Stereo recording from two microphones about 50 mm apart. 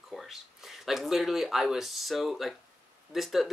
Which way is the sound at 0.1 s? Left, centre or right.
Centre.